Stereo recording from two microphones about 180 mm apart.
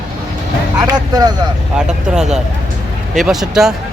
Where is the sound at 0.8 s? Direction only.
20° right (ahead or behind).